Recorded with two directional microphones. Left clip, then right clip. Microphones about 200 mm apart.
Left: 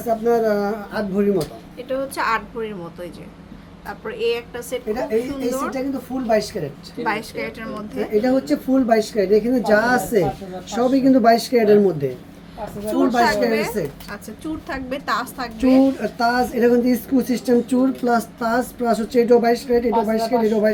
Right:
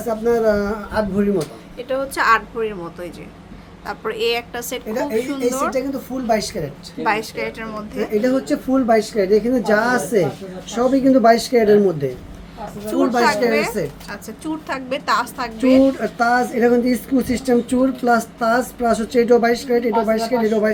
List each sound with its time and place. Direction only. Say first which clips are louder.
0.1 s a woman's voice: right 1 dB; centre (ahead or behind)
1.9 s a woman's voice: right 5 dB; 15° right (ahead or behind)
3.8 s a woman's voice: right 2 dB; 25° right (ahead or behind); by 20.7 s centre (ahead or behind)